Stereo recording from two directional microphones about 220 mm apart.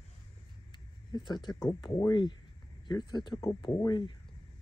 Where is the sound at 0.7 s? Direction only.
20° left (ahead or behind).